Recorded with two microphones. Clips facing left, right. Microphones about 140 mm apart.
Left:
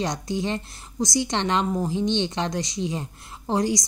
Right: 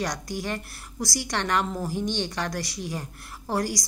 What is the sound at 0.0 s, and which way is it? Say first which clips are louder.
A woman's voice: left 4 dB; 25° left (ahead or behind).